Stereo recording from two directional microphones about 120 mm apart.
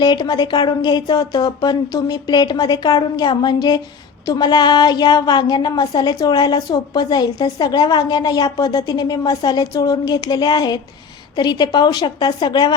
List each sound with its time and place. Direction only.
0.0 s a woman's voice: 35° left (ahead or behind)